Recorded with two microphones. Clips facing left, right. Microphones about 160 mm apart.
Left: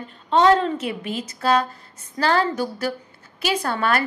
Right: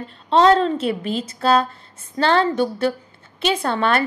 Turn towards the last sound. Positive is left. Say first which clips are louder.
# right 2 dB
turn(degrees=-25)  # may be behind; listen again after turning